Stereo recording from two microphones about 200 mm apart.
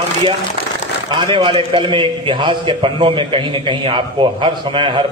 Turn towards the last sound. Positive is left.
turn(degrees=-25)  # may be behind; listen again after turning